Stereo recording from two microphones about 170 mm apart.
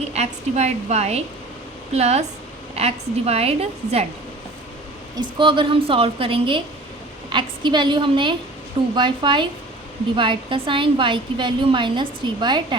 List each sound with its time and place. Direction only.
0.1 s a woman's voice: 40° right (ahead or behind)
5.1 s a woman's voice: 30° right (ahead or behind)